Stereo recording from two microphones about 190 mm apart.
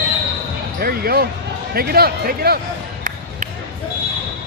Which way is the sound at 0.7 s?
50° right (ahead or behind).